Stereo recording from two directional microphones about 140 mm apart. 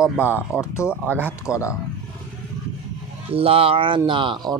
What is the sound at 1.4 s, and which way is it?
Speech, 20° left (ahead or behind).